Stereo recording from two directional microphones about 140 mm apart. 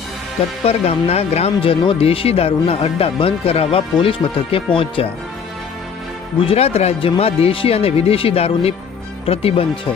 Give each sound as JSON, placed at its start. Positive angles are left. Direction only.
{"t": 0.6, "sound": "speech", "side_deg": 45}
{"t": 6.4, "sound": "speech", "side_deg": 45}